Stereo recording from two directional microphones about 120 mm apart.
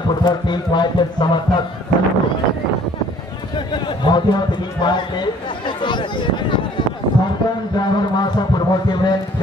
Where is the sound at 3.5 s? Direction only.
40° left (ahead or behind).